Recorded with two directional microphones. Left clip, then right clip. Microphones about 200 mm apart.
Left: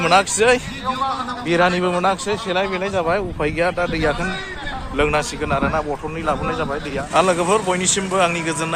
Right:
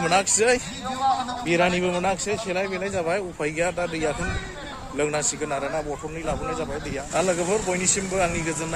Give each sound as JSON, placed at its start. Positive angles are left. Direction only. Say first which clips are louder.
{"t": 0.0, "sound": "a man's voice", "louder": "left 6 dB", "side_deg": -20}